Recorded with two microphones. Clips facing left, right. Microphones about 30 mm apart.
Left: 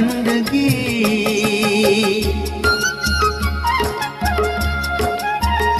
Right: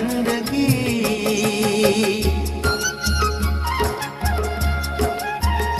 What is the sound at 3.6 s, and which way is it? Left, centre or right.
Music, left.